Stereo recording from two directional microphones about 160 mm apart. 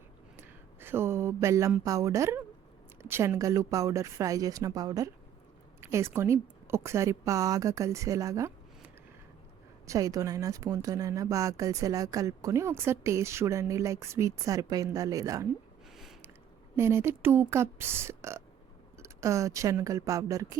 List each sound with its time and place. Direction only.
0.3 s a sound: 15° right (ahead or behind)
1.8 s speech: 20° right (ahead or behind)
9.8 s speech: 20° right (ahead or behind)
16.7 s speech: 15° right (ahead or behind)